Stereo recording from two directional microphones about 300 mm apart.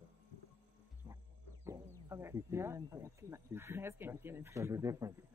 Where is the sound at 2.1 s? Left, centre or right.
Centre.